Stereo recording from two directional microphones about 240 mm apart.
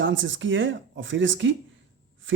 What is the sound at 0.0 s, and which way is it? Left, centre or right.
Speech, right.